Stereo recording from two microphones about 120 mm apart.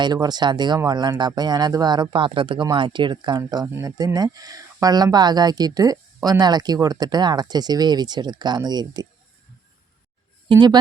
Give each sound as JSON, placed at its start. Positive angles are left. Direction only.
{"t": 0.0, "sound": "speech", "side_deg": -35}
{"t": 10.5, "sound": "speech", "side_deg": -35}